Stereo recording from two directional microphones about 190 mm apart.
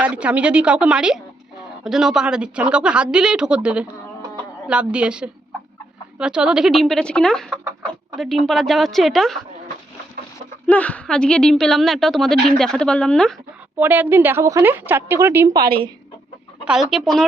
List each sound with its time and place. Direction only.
0.0 s a woman's voice: 5° right (ahead or behind)
7.5 s chicken: 10° right (ahead or behind)
8.2 s a woman's voice: centre (ahead or behind)
10.7 s a woman's voice: 5° left (ahead or behind)
13.7 s a woman's voice: 10° right (ahead or behind)
16.6 s a woman's voice: centre (ahead or behind)